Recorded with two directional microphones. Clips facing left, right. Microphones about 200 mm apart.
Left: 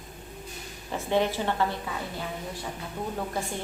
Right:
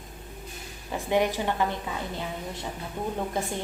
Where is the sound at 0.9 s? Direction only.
15° right (ahead or behind).